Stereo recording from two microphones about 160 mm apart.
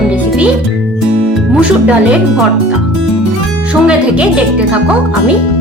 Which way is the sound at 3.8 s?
5° right (ahead or behind).